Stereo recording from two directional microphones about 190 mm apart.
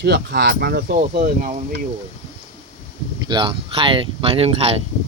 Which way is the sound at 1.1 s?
45° right (ahead or behind).